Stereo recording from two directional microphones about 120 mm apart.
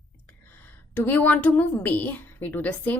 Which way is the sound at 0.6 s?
15° left (ahead or behind).